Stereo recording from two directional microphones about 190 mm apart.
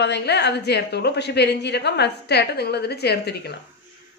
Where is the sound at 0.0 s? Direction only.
60° left (ahead or behind).